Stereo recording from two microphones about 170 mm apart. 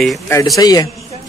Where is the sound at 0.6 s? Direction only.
20° left (ahead or behind).